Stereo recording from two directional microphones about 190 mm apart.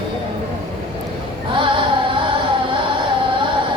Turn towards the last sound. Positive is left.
turn(degrees=-25)  # may be behind; listen again after turning